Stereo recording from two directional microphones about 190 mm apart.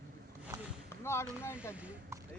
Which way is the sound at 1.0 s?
15° left (ahead or behind).